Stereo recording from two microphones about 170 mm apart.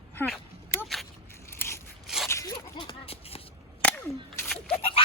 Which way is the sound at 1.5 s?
15° left (ahead or behind).